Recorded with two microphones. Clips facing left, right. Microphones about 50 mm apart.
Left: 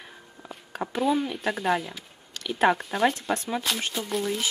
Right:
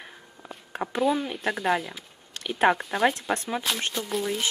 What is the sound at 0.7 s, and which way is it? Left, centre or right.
Speech, centre.